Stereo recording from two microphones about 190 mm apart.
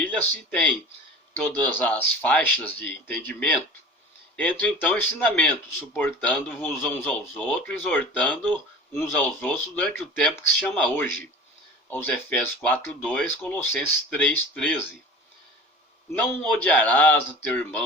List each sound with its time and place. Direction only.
0.0 s speech: 10° left (ahead or behind)
1.4 s speech: 10° left (ahead or behind)
16.1 s speech: 10° left (ahead or behind)